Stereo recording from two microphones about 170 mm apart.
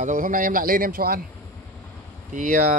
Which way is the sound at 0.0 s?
50° right (ahead or behind).